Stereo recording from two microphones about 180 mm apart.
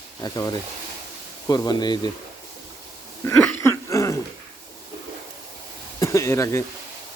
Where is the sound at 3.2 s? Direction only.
10° left (ahead or behind).